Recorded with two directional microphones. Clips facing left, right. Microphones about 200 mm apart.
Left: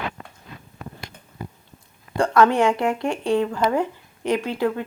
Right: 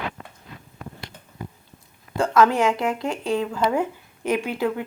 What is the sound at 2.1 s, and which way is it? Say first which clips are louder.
Speech: left 1 dB; centre (ahead or behind).